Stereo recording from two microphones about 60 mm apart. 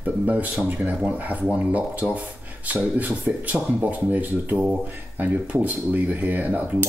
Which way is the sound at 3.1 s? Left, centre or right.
Right.